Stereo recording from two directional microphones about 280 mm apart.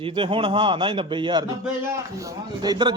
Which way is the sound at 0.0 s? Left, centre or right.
Centre.